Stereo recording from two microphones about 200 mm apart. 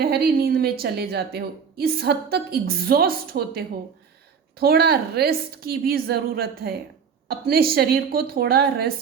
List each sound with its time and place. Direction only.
0.0 s a woman's voice: 50° right (ahead or behind)